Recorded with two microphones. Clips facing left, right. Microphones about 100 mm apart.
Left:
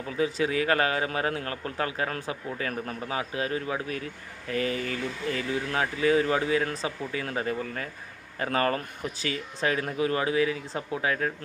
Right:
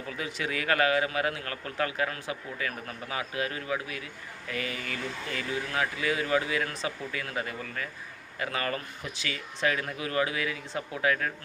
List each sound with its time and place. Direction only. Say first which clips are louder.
0.2 s speech: left 9 dB; 25° left (ahead or behind)